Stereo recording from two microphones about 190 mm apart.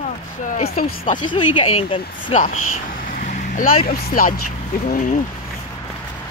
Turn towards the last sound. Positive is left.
turn(degrees=40)  # may be behind; listen again after turning